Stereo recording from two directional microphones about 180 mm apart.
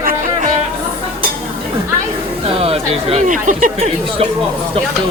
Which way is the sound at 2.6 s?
35° right (ahead or behind).